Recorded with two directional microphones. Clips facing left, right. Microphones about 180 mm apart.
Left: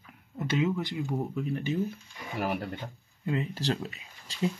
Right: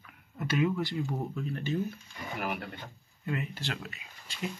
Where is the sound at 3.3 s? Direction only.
30° left (ahead or behind).